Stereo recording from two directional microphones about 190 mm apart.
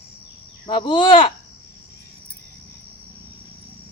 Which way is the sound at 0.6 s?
25° left (ahead or behind).